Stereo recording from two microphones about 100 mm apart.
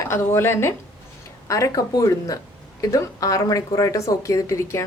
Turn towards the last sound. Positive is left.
turn(degrees=30)  # may be behind; listen again after turning